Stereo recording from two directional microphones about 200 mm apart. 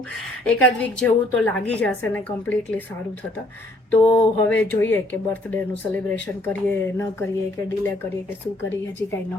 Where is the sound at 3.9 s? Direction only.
10° left (ahead or behind).